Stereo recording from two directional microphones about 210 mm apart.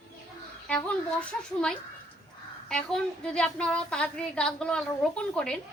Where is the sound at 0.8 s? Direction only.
5° left (ahead or behind).